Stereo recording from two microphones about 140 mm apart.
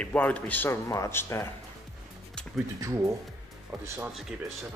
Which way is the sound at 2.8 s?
20° right (ahead or behind).